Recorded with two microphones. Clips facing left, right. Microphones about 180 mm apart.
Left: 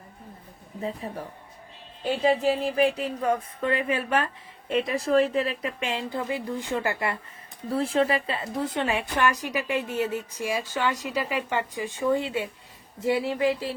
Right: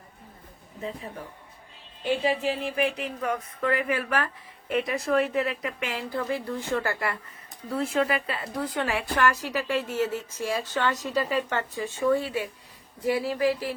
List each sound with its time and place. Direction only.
0.8 s speech: 35° left (ahead or behind); by 7.2 s 20° left (ahead or behind)
7.7 s a woman's voice: 35° left (ahead or behind)